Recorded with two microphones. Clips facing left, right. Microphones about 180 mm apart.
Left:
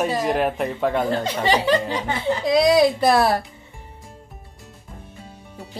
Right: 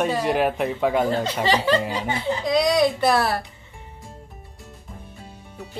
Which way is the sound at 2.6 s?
30° left (ahead or behind).